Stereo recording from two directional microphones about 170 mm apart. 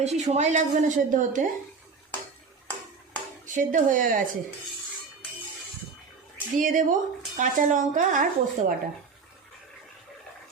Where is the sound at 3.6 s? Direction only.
50° right (ahead or behind).